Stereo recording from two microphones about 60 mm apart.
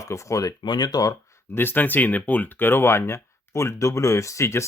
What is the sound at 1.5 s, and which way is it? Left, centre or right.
Speech, left.